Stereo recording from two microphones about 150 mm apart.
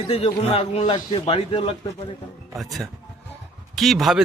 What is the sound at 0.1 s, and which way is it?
A man's voice, 40° left (ahead or behind).